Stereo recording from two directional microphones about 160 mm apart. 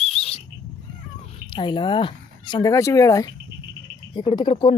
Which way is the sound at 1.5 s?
30° left (ahead or behind).